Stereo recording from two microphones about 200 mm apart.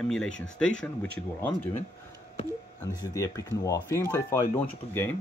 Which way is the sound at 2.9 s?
15° left (ahead or behind).